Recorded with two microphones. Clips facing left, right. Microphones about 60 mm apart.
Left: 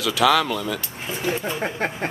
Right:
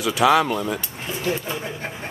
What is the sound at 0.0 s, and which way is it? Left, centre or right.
Speech, right.